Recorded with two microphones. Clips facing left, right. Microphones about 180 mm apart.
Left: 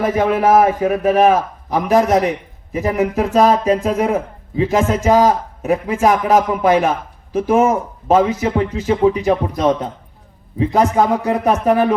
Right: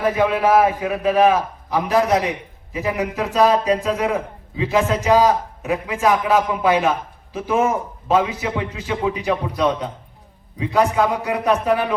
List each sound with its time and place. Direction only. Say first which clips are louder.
0.0 s speech: left 3 dB; 45° left (ahead or behind)